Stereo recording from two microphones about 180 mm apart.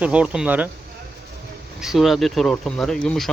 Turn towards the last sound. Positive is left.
turn(degrees=5)  # may be behind; listen again after turning